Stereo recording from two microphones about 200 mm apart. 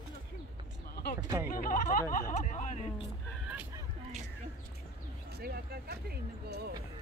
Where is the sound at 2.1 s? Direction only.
40° left (ahead or behind).